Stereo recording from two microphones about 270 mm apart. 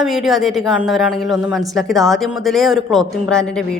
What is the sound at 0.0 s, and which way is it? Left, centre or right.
Speech, centre.